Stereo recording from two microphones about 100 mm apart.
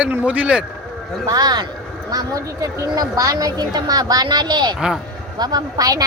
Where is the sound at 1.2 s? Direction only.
40° right (ahead or behind).